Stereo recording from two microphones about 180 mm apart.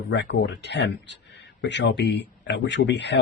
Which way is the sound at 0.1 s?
90° left.